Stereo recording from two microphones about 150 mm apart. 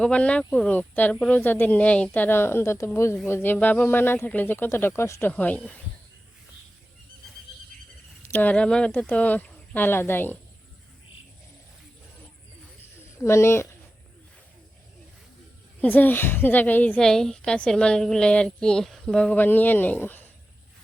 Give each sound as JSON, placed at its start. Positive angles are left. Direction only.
{"t": 0.0, "sound": "a woman's voice", "side_deg": 10}
{"t": 8.3, "sound": "a woman's voice", "side_deg": 10}
{"t": 13.1, "sound": "a woman's voice", "side_deg": 20}
{"t": 15.8, "sound": "a woman's voice", "side_deg": 10}